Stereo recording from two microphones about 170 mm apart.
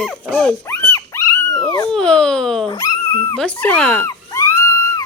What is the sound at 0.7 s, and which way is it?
Dog, 15° left (ahead or behind).